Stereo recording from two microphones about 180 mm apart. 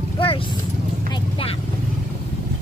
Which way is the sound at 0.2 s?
30° left (ahead or behind).